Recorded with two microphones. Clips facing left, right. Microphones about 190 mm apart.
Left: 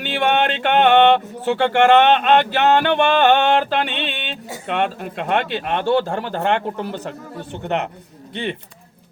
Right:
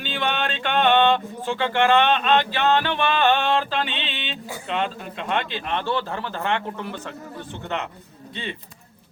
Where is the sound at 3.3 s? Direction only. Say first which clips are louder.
Left 5 dB; 70° left (ahead or behind); by 4.3 s 50° left (ahead or behind).